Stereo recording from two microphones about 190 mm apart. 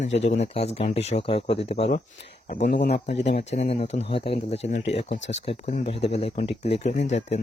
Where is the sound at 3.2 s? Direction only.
35° left (ahead or behind).